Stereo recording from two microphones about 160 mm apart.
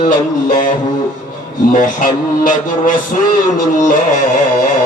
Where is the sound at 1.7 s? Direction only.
55° left (ahead or behind).